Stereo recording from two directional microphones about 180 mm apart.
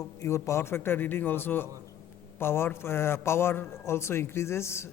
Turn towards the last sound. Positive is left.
turn(degrees=15)  # may be behind; listen again after turning